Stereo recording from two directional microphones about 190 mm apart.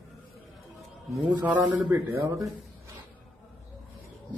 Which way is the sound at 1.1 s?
10° right (ahead or behind).